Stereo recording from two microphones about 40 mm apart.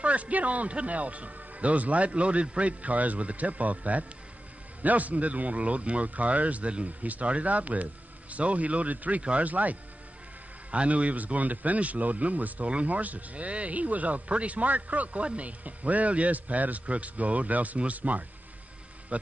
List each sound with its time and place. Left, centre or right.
0.0 s speech: right
9.2 s speech: right
9.5 s speech: right